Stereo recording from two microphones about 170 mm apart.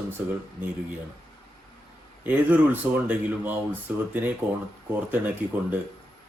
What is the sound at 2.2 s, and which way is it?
Speech, 10° right (ahead or behind).